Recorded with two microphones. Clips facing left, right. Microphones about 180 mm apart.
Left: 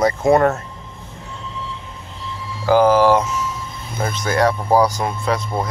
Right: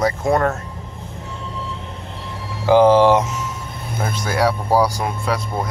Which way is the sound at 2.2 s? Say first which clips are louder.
Left 2 dB; 60° right (ahead or behind).